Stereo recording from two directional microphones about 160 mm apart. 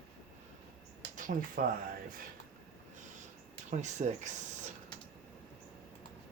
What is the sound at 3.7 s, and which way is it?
Speech, 45° right (ahead or behind).